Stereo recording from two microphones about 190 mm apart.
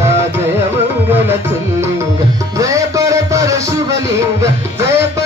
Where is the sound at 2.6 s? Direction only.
15° right (ahead or behind).